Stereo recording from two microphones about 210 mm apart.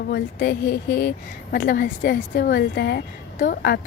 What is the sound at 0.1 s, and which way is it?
Speech, 50° left (ahead or behind).